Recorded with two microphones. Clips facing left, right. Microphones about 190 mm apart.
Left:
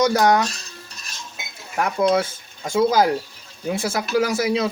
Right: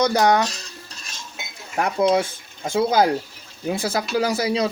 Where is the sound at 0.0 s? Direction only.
25° right (ahead or behind).